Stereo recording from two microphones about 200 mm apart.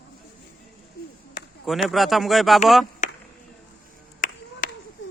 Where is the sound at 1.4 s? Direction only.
20° left (ahead or behind).